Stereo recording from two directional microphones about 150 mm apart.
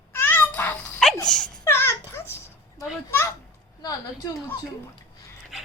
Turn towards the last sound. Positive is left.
turn(degrees=-5)  # may be behind; listen again after turning